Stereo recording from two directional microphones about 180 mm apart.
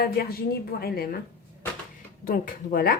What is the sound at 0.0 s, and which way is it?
A woman's voice, 55° left (ahead or behind).